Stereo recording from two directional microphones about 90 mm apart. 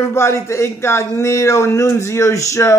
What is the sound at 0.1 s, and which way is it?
A man's voice, 30° left (ahead or behind).